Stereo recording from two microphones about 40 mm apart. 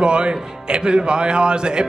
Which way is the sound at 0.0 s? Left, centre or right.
Right.